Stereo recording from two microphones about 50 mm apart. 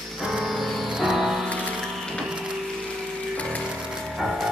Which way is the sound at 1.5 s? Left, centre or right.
Left.